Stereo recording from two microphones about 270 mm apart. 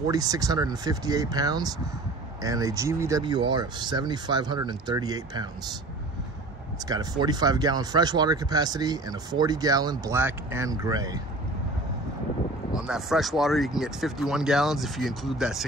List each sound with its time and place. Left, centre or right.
0.1 s speech: centre
6.9 s speech: centre
12.7 s speech: centre